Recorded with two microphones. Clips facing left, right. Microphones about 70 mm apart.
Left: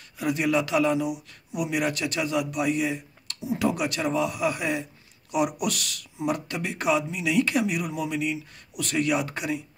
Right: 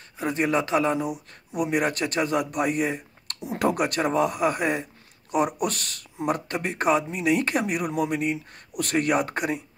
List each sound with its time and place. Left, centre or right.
0.2 s speech: right